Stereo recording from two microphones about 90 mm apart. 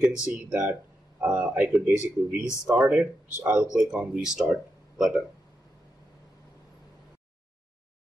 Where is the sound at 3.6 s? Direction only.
10° right (ahead or behind).